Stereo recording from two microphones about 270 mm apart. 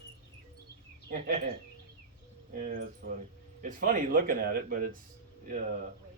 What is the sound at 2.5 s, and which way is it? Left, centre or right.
Speech, right.